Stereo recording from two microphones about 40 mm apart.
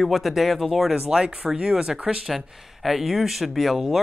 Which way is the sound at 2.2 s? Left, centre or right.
Centre.